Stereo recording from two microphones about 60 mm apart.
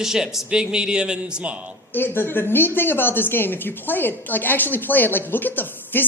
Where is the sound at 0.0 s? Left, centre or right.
Centre.